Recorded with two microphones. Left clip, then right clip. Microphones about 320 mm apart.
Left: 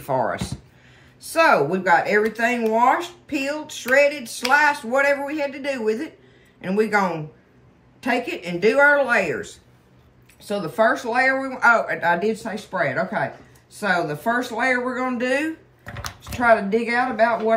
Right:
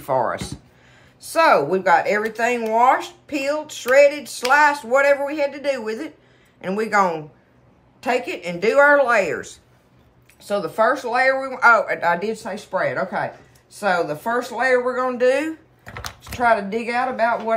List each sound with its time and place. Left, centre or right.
0.0 s speech: centre